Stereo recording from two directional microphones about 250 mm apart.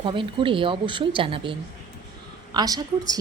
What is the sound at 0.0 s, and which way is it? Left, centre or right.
A woman's voice, centre.